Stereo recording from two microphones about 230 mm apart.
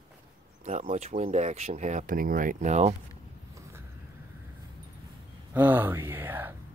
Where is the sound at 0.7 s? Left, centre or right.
Right.